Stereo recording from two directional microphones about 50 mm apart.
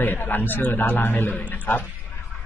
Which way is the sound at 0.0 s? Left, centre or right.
Left.